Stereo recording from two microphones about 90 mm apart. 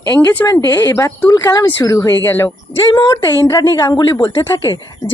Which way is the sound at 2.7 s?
70° left (ahead or behind).